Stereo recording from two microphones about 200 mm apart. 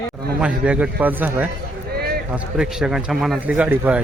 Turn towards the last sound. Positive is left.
turn(degrees=-5)  # may be behind; listen again after turning